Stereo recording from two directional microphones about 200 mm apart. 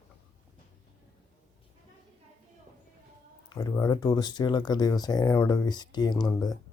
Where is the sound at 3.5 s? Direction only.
15° left (ahead or behind).